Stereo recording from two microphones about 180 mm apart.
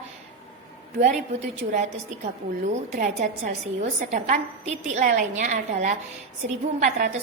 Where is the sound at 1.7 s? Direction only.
40° right (ahead or behind).